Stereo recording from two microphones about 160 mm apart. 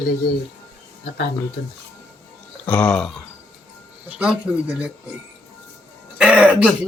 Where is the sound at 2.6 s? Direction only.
10° left (ahead or behind).